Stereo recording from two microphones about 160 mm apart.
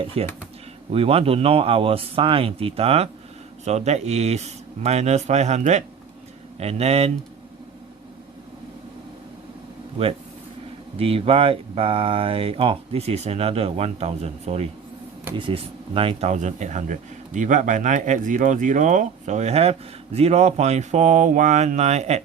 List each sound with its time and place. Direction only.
0.2 s speech: 40° right (ahead or behind)
10.9 s speech: 35° right (ahead or behind)